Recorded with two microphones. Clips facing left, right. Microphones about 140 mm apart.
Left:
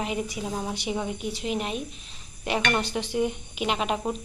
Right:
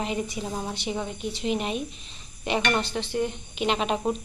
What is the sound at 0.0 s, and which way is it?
A woman's voice, 5° left (ahead or behind).